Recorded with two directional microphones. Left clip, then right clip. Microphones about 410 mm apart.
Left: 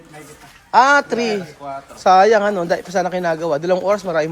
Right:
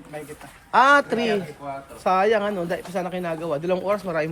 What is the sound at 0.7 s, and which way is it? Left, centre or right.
Speech, centre.